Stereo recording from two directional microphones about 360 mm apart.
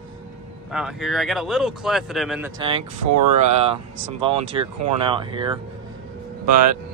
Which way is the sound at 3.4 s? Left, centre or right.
Centre.